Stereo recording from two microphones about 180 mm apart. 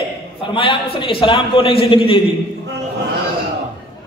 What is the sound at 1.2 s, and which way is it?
A man's voice, 30° left (ahead or behind).